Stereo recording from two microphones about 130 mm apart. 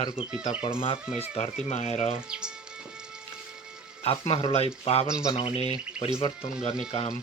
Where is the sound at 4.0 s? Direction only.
45° left (ahead or behind).